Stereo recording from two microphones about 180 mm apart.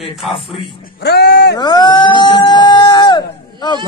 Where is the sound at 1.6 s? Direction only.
20° left (ahead or behind).